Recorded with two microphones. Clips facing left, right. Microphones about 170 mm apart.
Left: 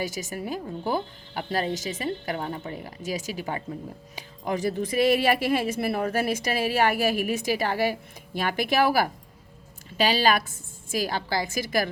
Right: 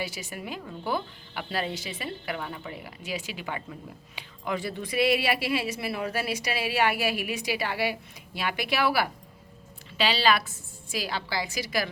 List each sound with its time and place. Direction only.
0.0 s speech: 45° left (ahead or behind)